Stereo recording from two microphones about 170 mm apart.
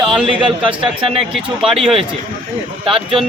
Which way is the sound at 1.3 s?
Centre (ahead or behind).